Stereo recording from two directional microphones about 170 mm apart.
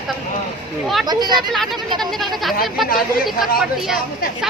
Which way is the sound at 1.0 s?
25° right (ahead or behind).